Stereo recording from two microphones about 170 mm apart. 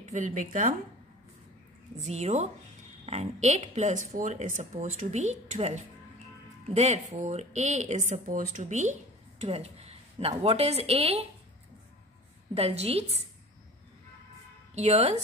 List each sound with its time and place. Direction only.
0.1 s speech: 50° right (ahead or behind)
2.0 s a woman's voice: 40° right (ahead or behind)
12.5 s a woman's voice: 35° right (ahead or behind)
14.7 s a woman's voice: 40° right (ahead or behind)